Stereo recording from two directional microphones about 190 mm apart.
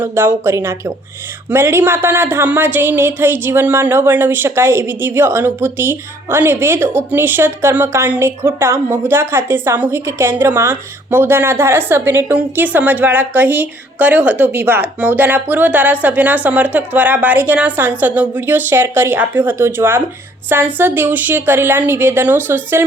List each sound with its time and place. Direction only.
0.0 s speech: 10° right (ahead or behind)